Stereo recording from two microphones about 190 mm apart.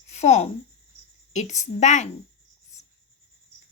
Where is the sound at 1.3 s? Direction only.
40° left (ahead or behind).